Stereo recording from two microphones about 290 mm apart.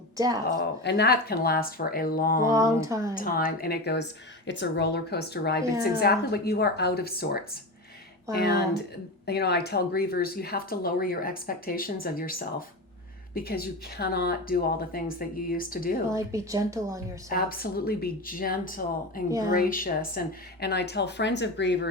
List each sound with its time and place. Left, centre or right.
0.6 s speech: left
2.5 s speech: centre
3.2 s speech: left
16.0 s speech: centre
17.2 s speech: left